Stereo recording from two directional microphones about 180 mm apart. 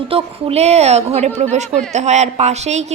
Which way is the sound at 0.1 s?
35° right (ahead or behind).